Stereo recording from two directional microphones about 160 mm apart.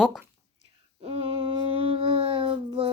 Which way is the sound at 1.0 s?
40° right (ahead or behind).